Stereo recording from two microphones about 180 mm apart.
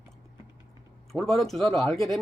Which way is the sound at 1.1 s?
Centre (ahead or behind).